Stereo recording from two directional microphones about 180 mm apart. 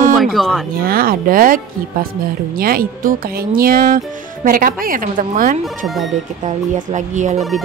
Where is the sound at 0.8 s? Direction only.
55° right (ahead or behind).